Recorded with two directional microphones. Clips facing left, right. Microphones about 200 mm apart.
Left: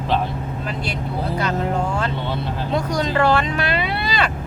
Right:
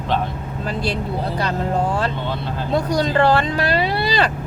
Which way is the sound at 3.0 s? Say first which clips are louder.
Right 1 dB; 35° right (ahead or behind).